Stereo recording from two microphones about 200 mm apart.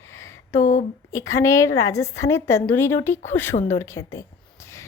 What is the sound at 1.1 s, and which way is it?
A woman's voice, 15° left (ahead or behind).